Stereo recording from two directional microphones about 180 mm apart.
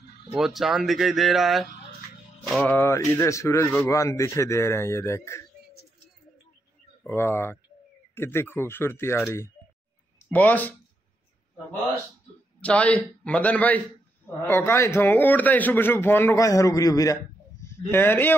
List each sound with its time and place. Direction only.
0.3 s a man's voice: centre (ahead or behind); by 5.4 s 15° left (ahead or behind)
7.0 s a man's voice: 10° left (ahead or behind)
10.3 s a man's voice: 10° left (ahead or behind)
12.6 s a man's voice: 5° left (ahead or behind)